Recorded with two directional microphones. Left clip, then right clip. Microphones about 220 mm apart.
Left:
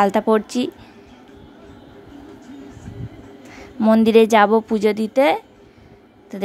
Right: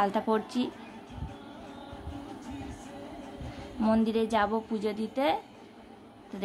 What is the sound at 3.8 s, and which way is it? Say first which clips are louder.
A woman's voice: left 14 dB; 30° left (ahead or behind).